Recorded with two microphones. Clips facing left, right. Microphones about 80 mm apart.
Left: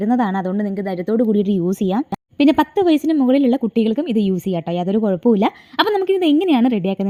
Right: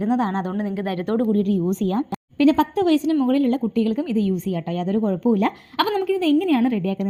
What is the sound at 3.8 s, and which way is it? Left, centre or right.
A woman's voice, left.